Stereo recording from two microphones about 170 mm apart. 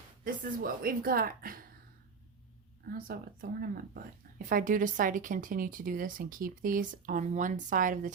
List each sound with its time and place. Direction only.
0.6 s speech: 60° right (ahead or behind)
3.1 s speech: 65° right (ahead or behind)